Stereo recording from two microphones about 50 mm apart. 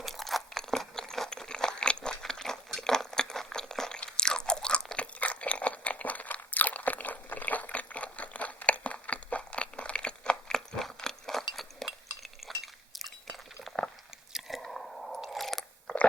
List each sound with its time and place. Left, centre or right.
0.0 s crunch: centre
4.9 s crunch: left; by 11.9 s centre
11.9 s a sound: centre
14.3 s squish: centre
15.2 s chewing: centre